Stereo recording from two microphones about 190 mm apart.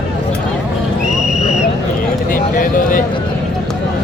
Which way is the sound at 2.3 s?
45° left (ahead or behind).